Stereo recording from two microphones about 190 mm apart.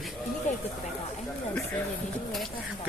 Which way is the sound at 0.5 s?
40° left (ahead or behind).